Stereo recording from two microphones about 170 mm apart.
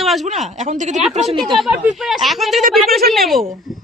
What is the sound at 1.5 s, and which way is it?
A woman's voice, centre (ahead or behind).